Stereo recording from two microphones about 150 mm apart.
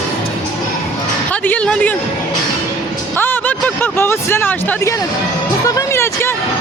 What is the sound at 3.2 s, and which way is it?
Speech, 15° left (ahead or behind).